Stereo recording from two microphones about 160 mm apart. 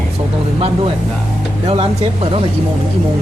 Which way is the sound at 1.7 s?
40° right (ahead or behind).